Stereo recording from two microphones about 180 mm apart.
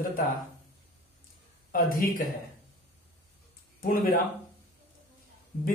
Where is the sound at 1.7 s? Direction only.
50° left (ahead or behind).